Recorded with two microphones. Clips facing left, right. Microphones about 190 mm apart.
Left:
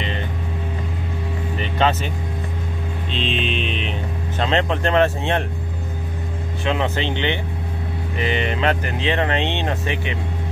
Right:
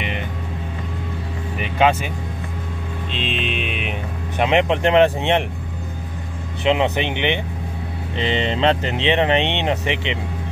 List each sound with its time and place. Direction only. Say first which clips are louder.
1.6 s vehicle: right 3 dB; 10° right (ahead or behind)
3.1 s music: left 2 dB; 5° right (ahead or behind)
4.4 s speech: right 3 dB; 15° right (ahead or behind)
6.6 s speech: right 4 dB; 20° right (ahead or behind)